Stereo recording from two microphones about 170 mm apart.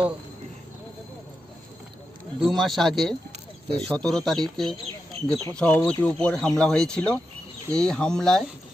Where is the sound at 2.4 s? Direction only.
Centre (ahead or behind).